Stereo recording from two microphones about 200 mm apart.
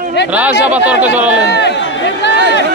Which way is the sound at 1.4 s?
60° left (ahead or behind).